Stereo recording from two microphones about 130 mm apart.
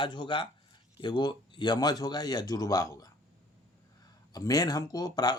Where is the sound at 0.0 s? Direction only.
40° left (ahead or behind).